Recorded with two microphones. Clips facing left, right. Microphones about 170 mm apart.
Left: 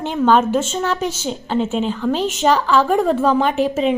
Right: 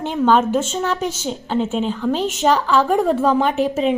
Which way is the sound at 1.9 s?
10° right (ahead or behind).